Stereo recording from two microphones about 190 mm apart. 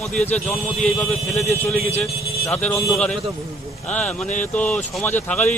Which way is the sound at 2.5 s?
15° left (ahead or behind).